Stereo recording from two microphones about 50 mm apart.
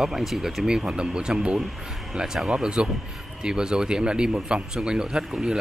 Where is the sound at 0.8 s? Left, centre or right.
Centre.